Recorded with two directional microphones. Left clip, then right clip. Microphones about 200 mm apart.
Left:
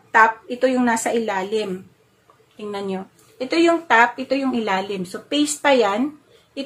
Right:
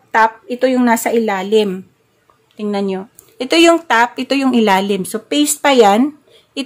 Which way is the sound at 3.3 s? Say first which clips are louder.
Right 7 dB; 60° right (ahead or behind).